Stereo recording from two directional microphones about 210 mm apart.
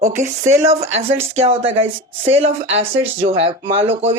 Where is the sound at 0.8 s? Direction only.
30° right (ahead or behind).